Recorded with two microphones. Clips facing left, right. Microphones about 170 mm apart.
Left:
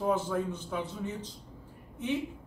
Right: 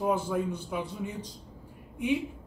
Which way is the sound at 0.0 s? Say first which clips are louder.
Right 1 dB; 10° right (ahead or behind).